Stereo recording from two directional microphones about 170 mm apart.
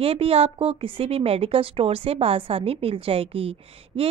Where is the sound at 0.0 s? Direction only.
35° right (ahead or behind).